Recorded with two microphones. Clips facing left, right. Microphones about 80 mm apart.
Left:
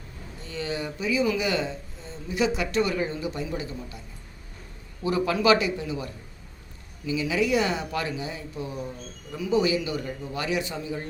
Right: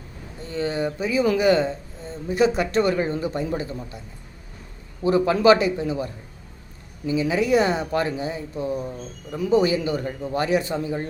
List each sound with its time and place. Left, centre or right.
0.4 s speech: right
5.0 s speech: right